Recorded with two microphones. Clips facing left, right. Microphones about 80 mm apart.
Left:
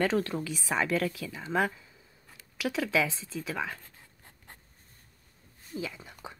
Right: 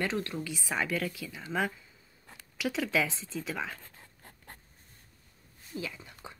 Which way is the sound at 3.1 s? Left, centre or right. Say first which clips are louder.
Even; right.